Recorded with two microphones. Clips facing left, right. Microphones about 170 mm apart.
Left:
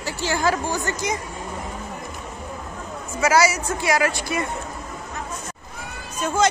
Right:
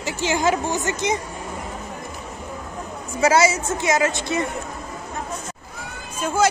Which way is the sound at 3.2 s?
25° right (ahead or behind).